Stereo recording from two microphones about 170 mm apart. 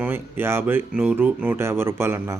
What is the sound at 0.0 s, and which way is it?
Speech, 15° right (ahead or behind).